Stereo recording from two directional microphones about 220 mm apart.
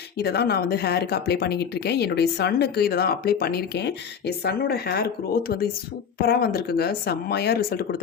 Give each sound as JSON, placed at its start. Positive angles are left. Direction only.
{"t": 0.2, "sound": "speech", "side_deg": 45}